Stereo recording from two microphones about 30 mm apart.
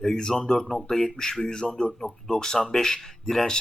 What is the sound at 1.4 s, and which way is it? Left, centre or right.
A man's voice, left.